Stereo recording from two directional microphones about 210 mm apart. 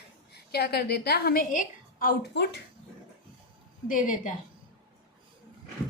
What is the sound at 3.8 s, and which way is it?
Speech, 40° left (ahead or behind).